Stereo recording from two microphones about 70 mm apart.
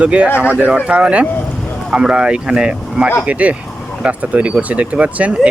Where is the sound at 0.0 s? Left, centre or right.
Centre.